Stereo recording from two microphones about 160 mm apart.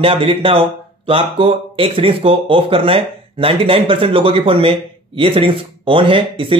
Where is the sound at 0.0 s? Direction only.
35° right (ahead or behind).